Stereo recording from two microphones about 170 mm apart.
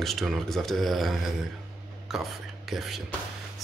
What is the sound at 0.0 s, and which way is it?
Speech, centre (ahead or behind).